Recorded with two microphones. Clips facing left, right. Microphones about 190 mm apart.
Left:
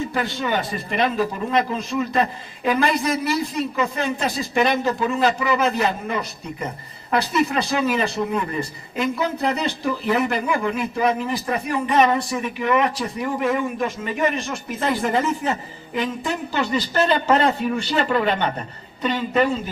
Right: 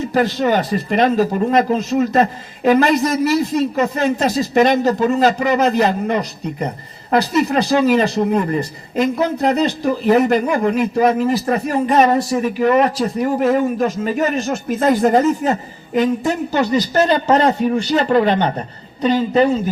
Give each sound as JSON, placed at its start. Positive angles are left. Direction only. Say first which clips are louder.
{"t": 0.0, "sound": "speech", "louder": "right 8 dB", "side_deg": -40}